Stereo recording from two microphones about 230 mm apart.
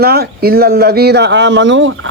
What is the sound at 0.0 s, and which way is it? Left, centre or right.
Speech, right.